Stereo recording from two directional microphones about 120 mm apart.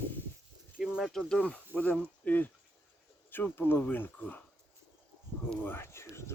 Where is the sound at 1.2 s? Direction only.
10° left (ahead or behind).